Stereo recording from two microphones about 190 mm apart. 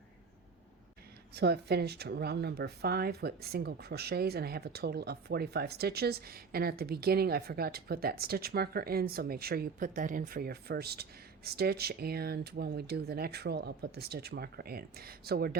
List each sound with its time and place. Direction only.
1.3 s speech: 60° right (ahead or behind)